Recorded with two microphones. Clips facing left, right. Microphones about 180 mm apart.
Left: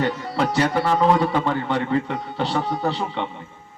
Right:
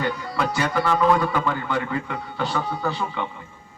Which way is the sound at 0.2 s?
30° left (ahead or behind).